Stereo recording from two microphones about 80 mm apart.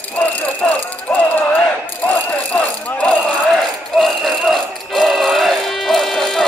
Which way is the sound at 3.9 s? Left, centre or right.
Centre.